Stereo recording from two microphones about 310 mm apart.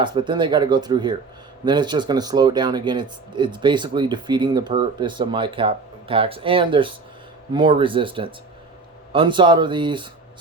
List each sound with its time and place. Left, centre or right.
0.0 s speech: centre